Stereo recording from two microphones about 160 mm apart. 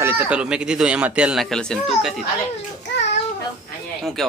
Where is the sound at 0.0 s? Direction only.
10° right (ahead or behind).